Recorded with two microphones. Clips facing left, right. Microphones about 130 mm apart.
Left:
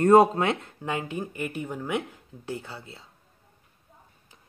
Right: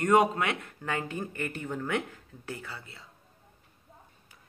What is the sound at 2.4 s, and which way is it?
Speech, 25° left (ahead or behind).